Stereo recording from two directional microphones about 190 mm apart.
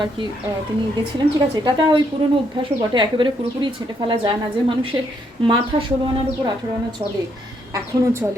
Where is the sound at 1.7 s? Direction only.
20° right (ahead or behind).